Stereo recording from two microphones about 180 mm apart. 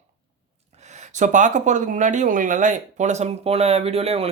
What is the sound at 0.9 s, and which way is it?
Speech, 40° right (ahead or behind).